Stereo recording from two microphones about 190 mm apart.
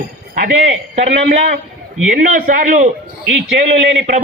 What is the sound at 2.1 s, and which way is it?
Speech, 45° right (ahead or behind).